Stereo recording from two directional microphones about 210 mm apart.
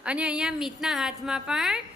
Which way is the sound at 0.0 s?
5° right (ahead or behind).